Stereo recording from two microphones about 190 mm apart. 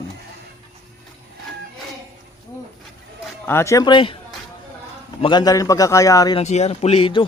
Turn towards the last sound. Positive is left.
turn(degrees=30)  # may be behind; listen again after turning